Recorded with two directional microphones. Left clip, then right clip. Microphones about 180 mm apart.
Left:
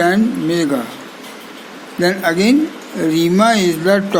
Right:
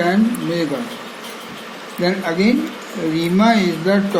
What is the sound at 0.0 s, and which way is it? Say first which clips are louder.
Speech: left 3 dB; 55° left (ahead or behind).